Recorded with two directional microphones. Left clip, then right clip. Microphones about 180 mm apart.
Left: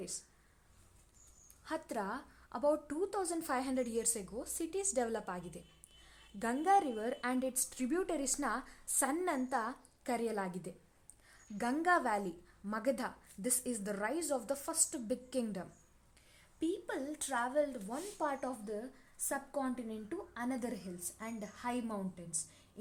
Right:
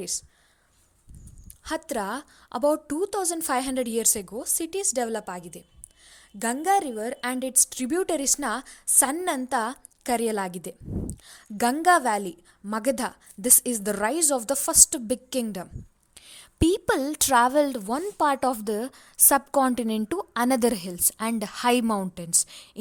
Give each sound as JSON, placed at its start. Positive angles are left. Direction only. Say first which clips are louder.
{"t": 1.6, "sound": "a woman's voice", "louder": "right 10 dB", "side_deg": -30}
{"t": 16.2, "sound": "a woman's voice", "louder": "right 15 dB", "side_deg": -40}